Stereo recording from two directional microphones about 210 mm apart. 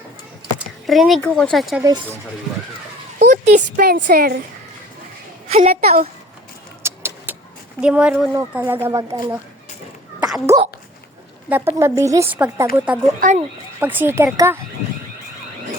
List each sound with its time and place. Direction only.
0.9 s speech: centre (ahead or behind)
3.2 s speech: 35° right (ahead or behind)
5.5 s a woman's voice: 30° right (ahead or behind)
6.8 s vehicle: 10° right (ahead or behind)
7.8 s speech: 5° right (ahead or behind)
10.2 s sneeze: 5° right (ahead or behind)
11.4 s speech: 10° right (ahead or behind)
13.1 s speech: 40° right (ahead or behind)
13.7 s speech: 10° right (ahead or behind)